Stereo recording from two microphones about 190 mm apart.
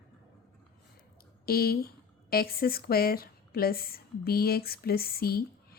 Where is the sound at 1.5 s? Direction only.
55° left (ahead or behind).